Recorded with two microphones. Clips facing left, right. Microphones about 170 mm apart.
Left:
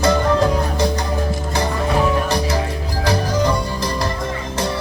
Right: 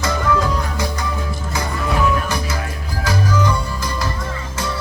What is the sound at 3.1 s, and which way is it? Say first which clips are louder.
Music: left 1 dB; 30° left (ahead or behind).